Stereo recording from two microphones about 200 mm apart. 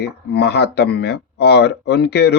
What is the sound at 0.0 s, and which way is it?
Speech, 55° left (ahead or behind).